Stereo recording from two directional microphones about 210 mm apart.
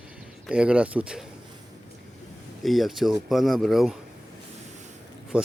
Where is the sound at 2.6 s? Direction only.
Centre (ahead or behind).